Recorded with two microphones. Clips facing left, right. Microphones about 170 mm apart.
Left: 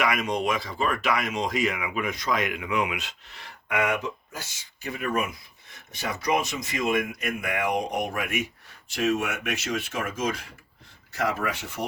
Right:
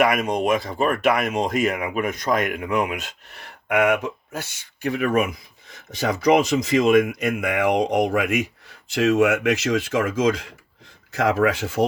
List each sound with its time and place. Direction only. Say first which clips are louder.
0.0 s speech: right 6 dB; 50° right (ahead or behind); by 11.9 s 90° right